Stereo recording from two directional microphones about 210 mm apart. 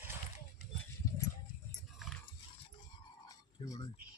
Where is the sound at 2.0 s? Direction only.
Centre (ahead or behind).